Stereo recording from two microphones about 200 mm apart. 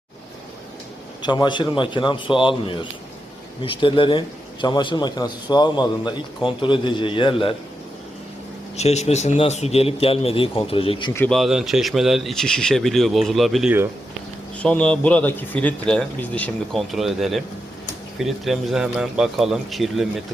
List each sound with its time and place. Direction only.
1.2 s a man's voice: 20° left (ahead or behind)
8.7 s a man's voice: 35° left (ahead or behind)
11.1 s a man's voice: 10° left (ahead or behind)
11.3 s speech: centre (ahead or behind)
14.6 s a man's voice: 5° left (ahead or behind)